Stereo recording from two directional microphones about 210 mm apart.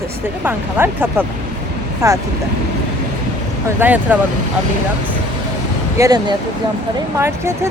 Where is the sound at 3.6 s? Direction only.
10° right (ahead or behind).